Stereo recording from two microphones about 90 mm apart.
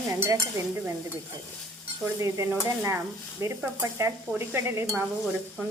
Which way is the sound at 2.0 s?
35° right (ahead or behind).